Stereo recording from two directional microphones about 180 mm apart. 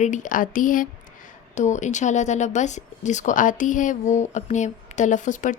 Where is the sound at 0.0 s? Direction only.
45° left (ahead or behind).